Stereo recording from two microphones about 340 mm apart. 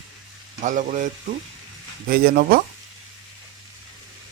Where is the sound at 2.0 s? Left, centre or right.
Right.